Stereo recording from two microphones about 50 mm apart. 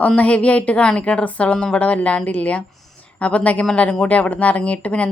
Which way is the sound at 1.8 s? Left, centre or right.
Left.